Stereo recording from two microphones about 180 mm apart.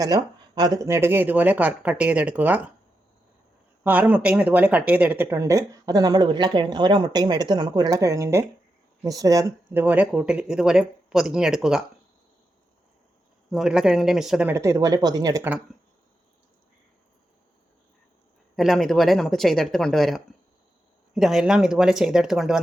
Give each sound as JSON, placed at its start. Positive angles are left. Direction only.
{"t": 0.0, "sound": "speech", "side_deg": -20}
{"t": 3.8, "sound": "speech", "side_deg": -10}
{"t": 13.5, "sound": "speech", "side_deg": 0}
{"t": 14.5, "sound": "speech", "side_deg": -15}
{"t": 18.5, "sound": "speech", "side_deg": 0}